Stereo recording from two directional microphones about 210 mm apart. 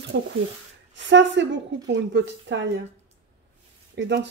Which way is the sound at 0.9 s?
60° right (ahead or behind).